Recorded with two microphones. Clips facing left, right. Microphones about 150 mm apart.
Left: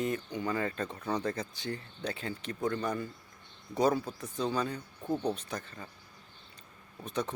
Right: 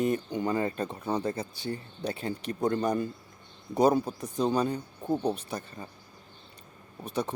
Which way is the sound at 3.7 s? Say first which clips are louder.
Right 5 dB; 15° right (ahead or behind).